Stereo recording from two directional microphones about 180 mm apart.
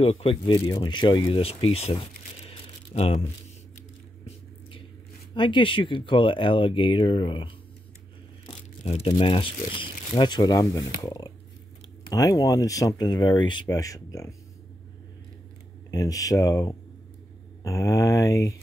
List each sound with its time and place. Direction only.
0.0 s speech: 30° left (ahead or behind)
5.3 s speech: 25° left (ahead or behind)
15.9 s speech: 20° left (ahead or behind)